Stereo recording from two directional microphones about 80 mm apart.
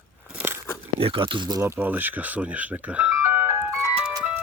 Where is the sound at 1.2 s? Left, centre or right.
Right.